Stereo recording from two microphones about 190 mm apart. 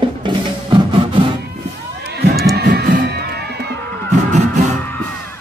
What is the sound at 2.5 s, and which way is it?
Music, 55° right (ahead or behind).